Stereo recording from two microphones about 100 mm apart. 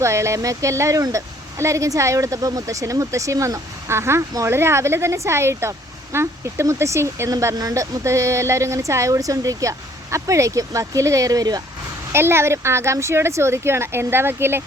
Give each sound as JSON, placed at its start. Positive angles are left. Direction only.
{"t": 0.0, "sound": "speech", "side_deg": -30}
{"t": 12.1, "sound": "speech", "side_deg": -25}